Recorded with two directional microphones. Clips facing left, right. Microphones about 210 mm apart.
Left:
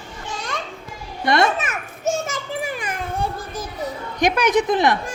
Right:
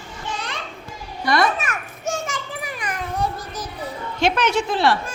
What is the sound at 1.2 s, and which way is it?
Children playing, 25° left (ahead or behind).